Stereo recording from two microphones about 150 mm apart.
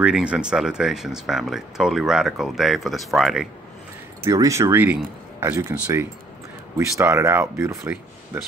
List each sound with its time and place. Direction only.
0.0 s speech: 5° right (ahead or behind)
4.2 s speech: 20° right (ahead or behind)